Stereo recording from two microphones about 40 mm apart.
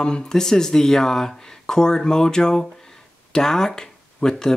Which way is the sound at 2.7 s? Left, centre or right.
Centre.